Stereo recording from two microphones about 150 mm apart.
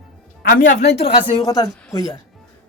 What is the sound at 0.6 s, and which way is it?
Speech, 60° left (ahead or behind).